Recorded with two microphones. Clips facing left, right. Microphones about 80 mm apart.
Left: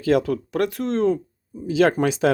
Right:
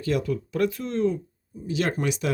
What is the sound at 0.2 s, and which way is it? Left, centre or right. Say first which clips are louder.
Speech: left 3 dB; left.